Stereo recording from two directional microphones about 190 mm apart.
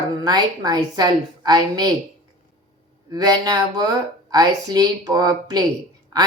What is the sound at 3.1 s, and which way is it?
A woman's voice, 20° right (ahead or behind).